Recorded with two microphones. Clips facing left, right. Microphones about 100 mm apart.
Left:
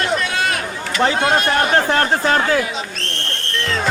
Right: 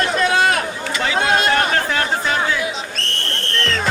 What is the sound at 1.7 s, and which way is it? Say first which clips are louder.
Speech: left 4 dB; 45° left (ahead or behind).